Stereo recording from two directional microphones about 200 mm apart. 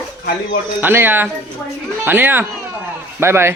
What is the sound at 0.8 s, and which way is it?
Speech, 10° right (ahead or behind).